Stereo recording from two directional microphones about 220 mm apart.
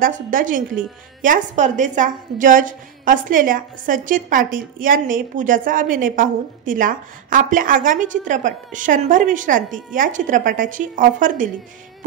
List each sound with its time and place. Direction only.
0.0 s a woman's voice: 40° right (ahead or behind)